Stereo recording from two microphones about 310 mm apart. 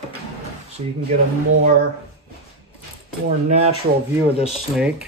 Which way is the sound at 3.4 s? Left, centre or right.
Right.